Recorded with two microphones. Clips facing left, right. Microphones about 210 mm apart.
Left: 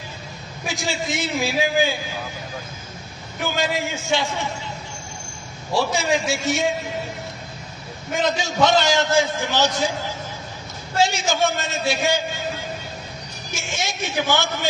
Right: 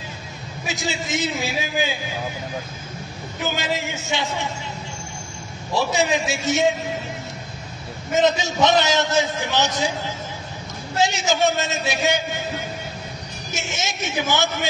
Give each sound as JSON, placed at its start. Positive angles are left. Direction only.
{"t": 0.7, "sound": "a man's voice", "side_deg": -20}
{"t": 3.5, "sound": "a man's voice", "side_deg": -20}
{"t": 5.9, "sound": "a man's voice", "side_deg": -20}
{"t": 8.2, "sound": "a man's voice", "side_deg": -20}
{"t": 13.6, "sound": "a man's voice", "side_deg": -20}